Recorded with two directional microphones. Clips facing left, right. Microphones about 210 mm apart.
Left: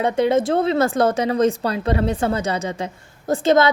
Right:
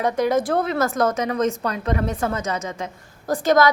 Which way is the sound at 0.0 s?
25° left (ahead or behind).